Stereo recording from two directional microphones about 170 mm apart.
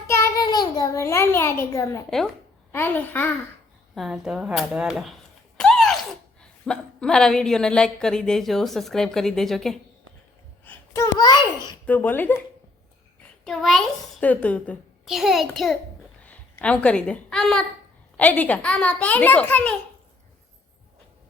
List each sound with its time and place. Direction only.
0.1 s a child's voice: 15° left (ahead or behind)
2.0 s a child's voice: 5° left (ahead or behind)
3.9 s speech: centre (ahead or behind)
10.7 s a child's voice: 20° left (ahead or behind)
11.9 s a child's voice: 10° left (ahead or behind)
13.4 s a child's voice: centre (ahead or behind)